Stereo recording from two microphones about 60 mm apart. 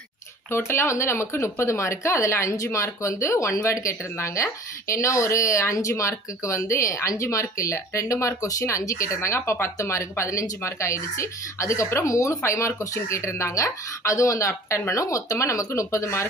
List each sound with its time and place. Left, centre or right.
0.5 s speech: left